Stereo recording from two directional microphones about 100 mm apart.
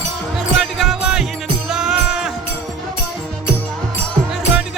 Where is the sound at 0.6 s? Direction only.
Centre (ahead or behind).